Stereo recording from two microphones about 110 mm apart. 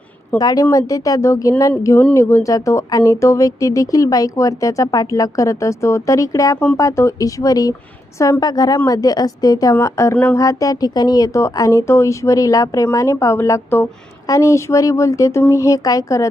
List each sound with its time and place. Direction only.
0.3 s speech: 35° left (ahead or behind)